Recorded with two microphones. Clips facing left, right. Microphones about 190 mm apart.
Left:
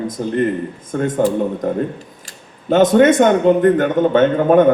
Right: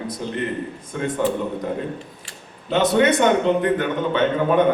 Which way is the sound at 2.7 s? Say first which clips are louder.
Left 6 dB; 45° left (ahead or behind).